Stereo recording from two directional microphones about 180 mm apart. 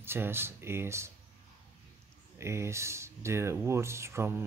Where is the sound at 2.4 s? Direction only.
15° right (ahead or behind).